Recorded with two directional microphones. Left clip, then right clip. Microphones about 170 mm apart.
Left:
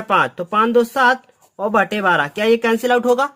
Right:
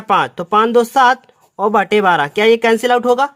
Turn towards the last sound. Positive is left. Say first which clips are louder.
# right 3 dB
turn(degrees=-25)  # may be behind; listen again after turning